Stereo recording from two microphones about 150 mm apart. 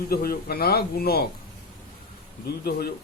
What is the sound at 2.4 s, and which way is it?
Speech, 90° left.